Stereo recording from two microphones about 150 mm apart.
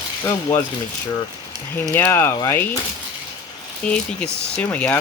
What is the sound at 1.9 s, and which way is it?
Speech, 15° left (ahead or behind).